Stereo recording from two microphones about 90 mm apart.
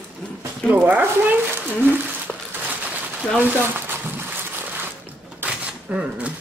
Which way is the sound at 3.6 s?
25° right (ahead or behind).